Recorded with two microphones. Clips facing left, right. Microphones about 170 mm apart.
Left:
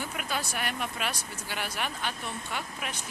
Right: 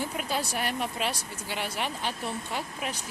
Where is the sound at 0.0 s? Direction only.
30° right (ahead or behind).